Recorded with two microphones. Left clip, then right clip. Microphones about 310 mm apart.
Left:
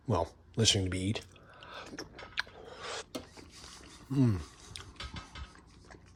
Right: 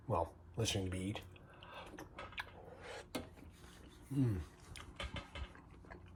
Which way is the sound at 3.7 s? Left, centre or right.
Centre.